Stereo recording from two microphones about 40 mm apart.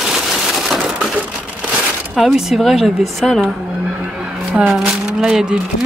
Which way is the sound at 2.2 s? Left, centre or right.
Centre.